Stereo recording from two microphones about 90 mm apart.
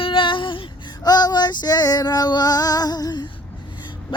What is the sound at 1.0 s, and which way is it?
Child singing, 50° left (ahead or behind).